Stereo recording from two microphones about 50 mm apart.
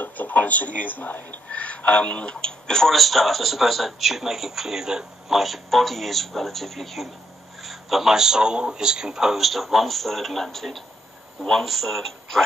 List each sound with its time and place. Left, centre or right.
0.0 s speech: left
1.5 s speech: left; by 12.4 s centre